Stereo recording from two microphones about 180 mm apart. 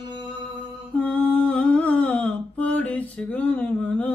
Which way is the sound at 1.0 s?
10° left (ahead or behind).